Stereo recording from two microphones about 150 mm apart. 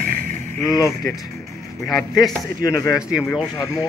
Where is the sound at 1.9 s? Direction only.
Centre (ahead or behind).